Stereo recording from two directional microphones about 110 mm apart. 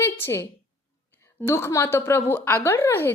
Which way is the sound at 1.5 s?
25° left (ahead or behind).